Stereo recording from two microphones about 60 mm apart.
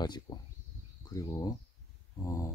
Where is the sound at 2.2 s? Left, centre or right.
Left.